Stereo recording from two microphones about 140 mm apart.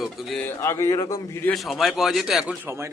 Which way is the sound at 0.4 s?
20° left (ahead or behind).